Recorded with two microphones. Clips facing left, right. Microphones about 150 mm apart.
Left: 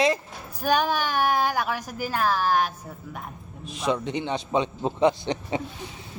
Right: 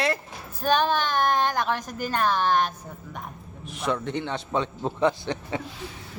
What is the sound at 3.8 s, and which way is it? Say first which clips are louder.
A woman's voice: left 1 dB; 15° left (ahead or behind).